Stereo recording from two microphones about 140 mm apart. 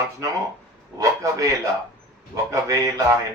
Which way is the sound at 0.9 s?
25° right (ahead or behind).